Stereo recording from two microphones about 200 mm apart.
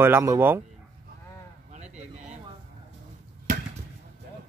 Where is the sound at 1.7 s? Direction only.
35° right (ahead or behind).